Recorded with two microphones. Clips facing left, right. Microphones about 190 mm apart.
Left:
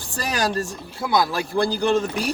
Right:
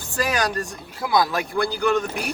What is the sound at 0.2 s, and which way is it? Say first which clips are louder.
Speech: even; 35° left (ahead or behind).